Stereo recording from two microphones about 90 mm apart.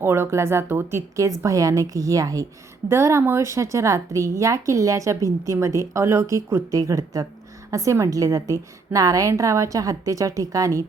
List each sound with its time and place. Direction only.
0.0 s a woman's voice: 25° right (ahead or behind)